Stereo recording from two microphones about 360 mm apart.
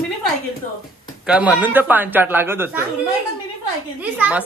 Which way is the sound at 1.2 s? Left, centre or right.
Centre.